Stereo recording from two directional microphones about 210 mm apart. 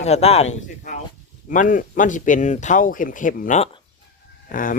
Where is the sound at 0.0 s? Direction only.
30° left (ahead or behind).